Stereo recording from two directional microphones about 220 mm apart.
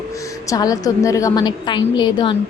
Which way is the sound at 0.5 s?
15° left (ahead or behind).